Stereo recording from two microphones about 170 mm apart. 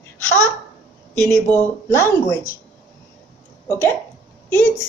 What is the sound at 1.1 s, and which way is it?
A woman's voice, 15° left (ahead or behind).